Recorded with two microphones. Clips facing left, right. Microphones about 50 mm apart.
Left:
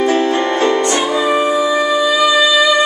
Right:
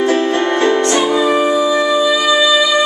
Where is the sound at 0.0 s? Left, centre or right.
Centre.